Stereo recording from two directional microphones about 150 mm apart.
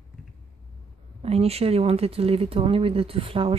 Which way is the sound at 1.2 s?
45° right (ahead or behind).